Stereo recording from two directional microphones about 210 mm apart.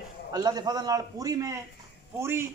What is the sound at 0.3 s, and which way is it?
A man's voice, 20° right (ahead or behind).